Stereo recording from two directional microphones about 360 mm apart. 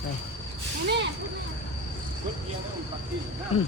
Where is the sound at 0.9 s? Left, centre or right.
Right.